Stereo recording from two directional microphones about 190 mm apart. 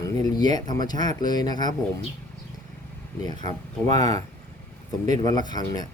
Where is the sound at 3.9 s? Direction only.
20° left (ahead or behind).